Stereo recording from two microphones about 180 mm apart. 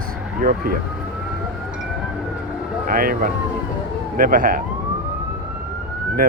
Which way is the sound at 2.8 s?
50° right (ahead or behind).